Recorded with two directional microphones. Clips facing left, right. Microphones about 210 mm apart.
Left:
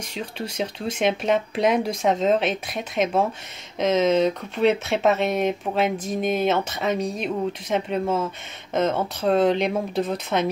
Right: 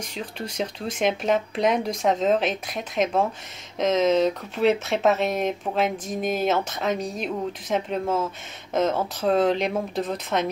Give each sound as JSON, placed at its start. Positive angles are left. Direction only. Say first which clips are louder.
{"t": 0.0, "sound": "speech", "louder": "left 2 dB", "side_deg": 0}